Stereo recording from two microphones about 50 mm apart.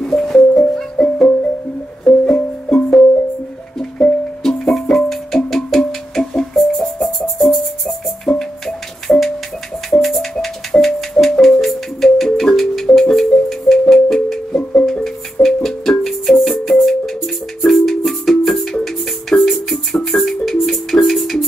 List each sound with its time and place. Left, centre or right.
0.0 s music: centre
4.4 s music: centre
10.3 s music: centre
15.4 s music: centre